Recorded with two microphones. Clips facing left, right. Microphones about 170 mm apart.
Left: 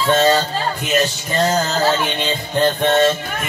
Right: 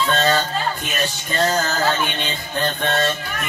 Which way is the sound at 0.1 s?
25° left (ahead or behind).